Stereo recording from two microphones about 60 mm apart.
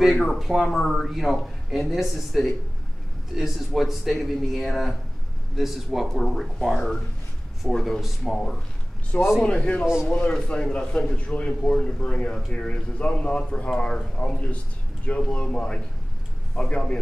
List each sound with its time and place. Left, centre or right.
0.1 s speech: centre
0.4 s speech: centre
9.4 s speech: left